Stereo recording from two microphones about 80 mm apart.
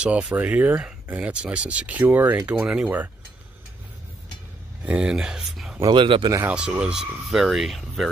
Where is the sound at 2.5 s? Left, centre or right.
Centre.